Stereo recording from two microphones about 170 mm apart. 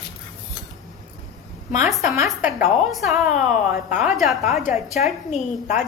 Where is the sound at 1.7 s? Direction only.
45° left (ahead or behind).